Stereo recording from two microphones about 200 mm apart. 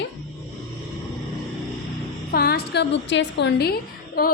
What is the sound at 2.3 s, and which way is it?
A woman's voice, 50° left (ahead or behind).